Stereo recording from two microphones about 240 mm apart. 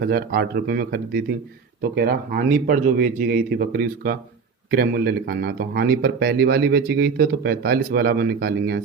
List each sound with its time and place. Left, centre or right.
0.0 s speech: right